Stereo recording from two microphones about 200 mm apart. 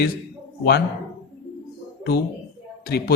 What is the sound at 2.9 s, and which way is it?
Speech, 50° left (ahead or behind).